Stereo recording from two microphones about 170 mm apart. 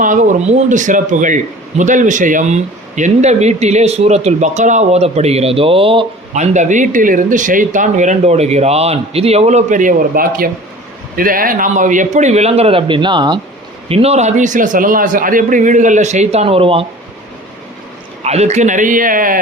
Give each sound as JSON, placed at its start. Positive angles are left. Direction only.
{"t": 0.0, "sound": "a man's voice", "side_deg": -50}
{"t": 13.8, "sound": "a man's voice", "side_deg": -35}
{"t": 18.2, "sound": "a man's voice", "side_deg": -40}